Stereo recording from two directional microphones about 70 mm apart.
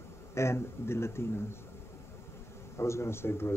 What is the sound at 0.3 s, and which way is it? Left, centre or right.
Speech, left.